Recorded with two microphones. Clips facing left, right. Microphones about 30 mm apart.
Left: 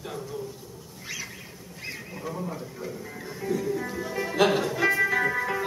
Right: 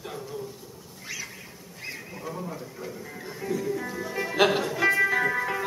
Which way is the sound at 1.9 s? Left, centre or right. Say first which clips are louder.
Left 1 dB; centre.